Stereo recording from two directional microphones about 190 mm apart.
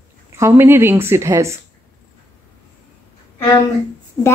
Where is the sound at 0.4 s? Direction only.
15° right (ahead or behind).